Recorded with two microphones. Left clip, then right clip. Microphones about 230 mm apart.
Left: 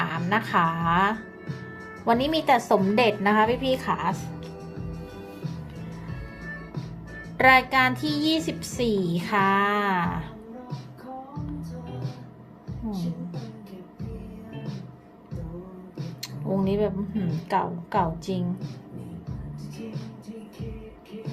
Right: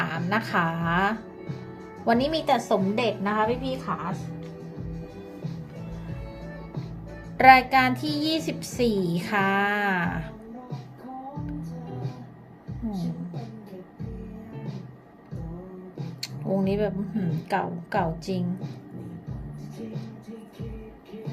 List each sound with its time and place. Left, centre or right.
0.0 s a woman's voice: centre; by 4.1 s left
7.3 s speech: centre
16.2 s speech: centre